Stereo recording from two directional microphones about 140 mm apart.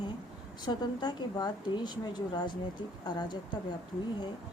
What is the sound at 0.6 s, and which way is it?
A woman's voice, 30° left (ahead or behind).